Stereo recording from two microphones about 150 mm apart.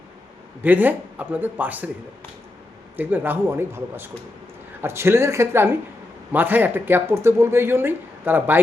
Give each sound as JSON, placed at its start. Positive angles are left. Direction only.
{"t": 0.6, "sound": "speech", "side_deg": -10}
{"t": 2.9, "sound": "speech", "side_deg": -10}